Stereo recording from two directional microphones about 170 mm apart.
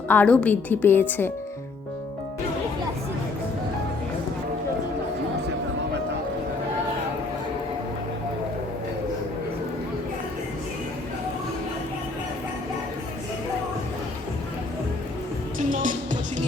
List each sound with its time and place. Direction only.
0.1 s a woman's voice: 10° left (ahead or behind)
15.5 s music: 50° right (ahead or behind)